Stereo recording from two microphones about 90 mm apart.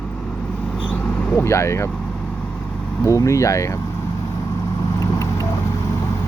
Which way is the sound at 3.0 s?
35° left (ahead or behind).